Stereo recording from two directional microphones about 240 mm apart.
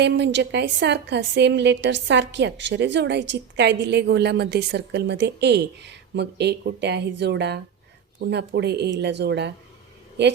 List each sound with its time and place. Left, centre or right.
0.0 s a woman's voice: right